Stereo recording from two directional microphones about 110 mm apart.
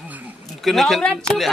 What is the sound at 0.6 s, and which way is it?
Speech, centre (ahead or behind).